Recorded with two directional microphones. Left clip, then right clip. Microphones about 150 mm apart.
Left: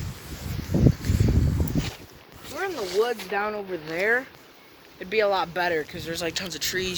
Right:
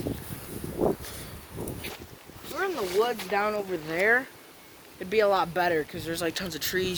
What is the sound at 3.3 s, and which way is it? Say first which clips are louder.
Speech: right 1 dB; 50° right (ahead or behind).